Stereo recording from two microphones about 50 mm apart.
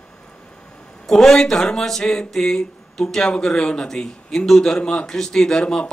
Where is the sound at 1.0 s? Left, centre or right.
Centre.